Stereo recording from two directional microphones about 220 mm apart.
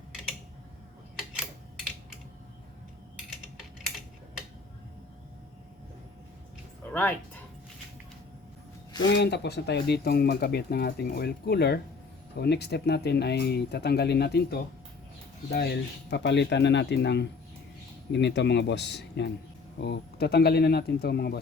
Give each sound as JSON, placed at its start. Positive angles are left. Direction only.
{"t": 6.9, "sound": "speech", "side_deg": 10}
{"t": 9.1, "sound": "speech", "side_deg": 50}